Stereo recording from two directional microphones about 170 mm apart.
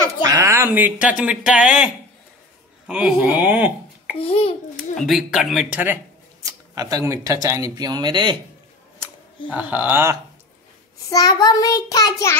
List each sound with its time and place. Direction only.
0.0 s a sound: 20° right (ahead or behind)
1.0 s speech: 5° right (ahead or behind)
2.9 s speech: 5° right (ahead or behind)
4.2 s a child's voice: 35° left (ahead or behind)
4.9 s speech: centre (ahead or behind)
6.4 s speech: 20° right (ahead or behind)
9.5 s speech: 10° right (ahead or behind)
11.1 s child singing: 20° left (ahead or behind)